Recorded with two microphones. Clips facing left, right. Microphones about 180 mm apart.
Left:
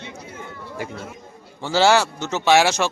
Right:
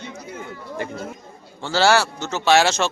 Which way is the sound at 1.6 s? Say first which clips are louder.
Left 1 dB; 15° left (ahead or behind).